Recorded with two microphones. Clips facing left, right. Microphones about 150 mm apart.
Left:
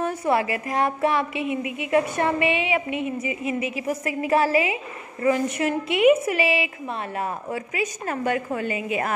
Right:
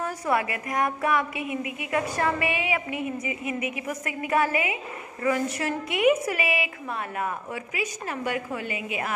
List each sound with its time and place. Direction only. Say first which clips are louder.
0.0 s a woman's voice: left 4 dB; 25° left (ahead or behind)
7.7 s a woman's voice: left 3 dB; 45° left (ahead or behind)